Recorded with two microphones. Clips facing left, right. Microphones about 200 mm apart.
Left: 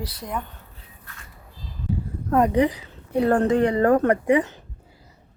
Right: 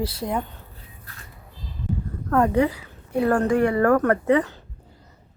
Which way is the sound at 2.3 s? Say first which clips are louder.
Left 1 dB; 15° left (ahead or behind).